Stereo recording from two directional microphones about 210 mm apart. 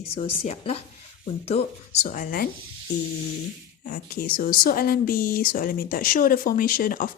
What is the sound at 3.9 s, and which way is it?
Speech, 45° left (ahead or behind).